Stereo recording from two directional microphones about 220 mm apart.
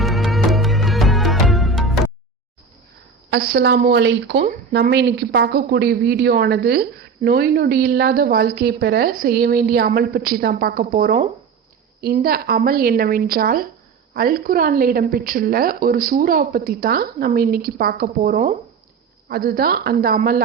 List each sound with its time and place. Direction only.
0.0 s music: centre (ahead or behind)
3.2 s a woman's voice: 45° right (ahead or behind)